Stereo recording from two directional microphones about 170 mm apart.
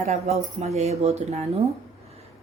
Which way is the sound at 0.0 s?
40° right (ahead or behind).